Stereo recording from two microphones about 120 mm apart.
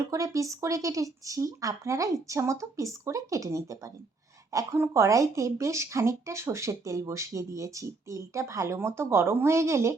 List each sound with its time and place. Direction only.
0.0 s speech: 25° right (ahead or behind)